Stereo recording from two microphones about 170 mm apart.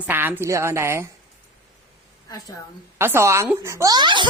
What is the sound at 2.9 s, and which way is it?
A woman's voice, 15° right (ahead or behind).